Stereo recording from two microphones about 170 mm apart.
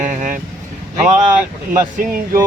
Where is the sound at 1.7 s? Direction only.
50° right (ahead or behind).